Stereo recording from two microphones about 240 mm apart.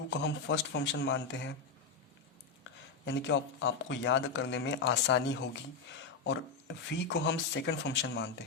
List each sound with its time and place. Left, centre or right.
0.1 s speech: left
3.1 s speech: left
6.9 s speech: left